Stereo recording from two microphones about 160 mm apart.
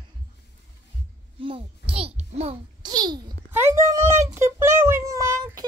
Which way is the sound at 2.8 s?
25° right (ahead or behind).